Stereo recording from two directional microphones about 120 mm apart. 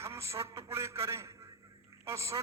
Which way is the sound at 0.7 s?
20° right (ahead or behind).